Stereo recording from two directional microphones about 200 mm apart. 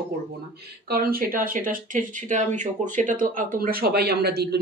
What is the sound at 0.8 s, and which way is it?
Speech, 45° right (ahead or behind).